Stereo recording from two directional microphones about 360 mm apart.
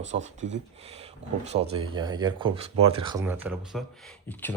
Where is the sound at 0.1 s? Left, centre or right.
Centre.